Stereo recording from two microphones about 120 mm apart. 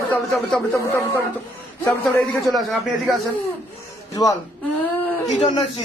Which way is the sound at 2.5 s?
Centre (ahead or behind).